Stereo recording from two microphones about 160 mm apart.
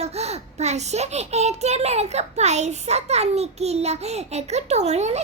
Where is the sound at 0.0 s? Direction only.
40° right (ahead or behind).